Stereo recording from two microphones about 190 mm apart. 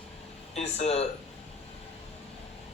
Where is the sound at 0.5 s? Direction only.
35° left (ahead or behind).